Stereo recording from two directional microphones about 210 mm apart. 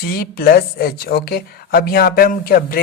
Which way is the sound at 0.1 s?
45° left (ahead or behind).